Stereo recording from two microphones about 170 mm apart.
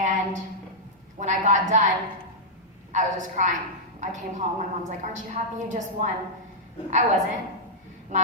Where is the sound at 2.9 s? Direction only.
45° right (ahead or behind).